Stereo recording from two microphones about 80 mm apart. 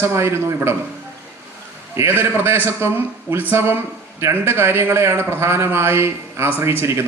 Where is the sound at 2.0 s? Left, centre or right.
Right.